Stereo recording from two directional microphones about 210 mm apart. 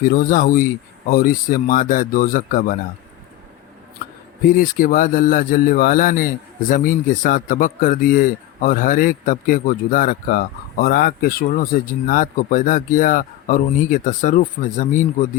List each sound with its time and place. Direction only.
0.0 s a man's voice: 40° left (ahead or behind)
4.4 s a man's voice: 40° left (ahead or behind)